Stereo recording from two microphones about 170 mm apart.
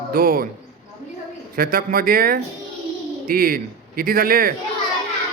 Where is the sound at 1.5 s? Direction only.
60° right (ahead or behind).